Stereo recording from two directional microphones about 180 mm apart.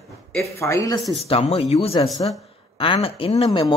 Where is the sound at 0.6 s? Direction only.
15° left (ahead or behind).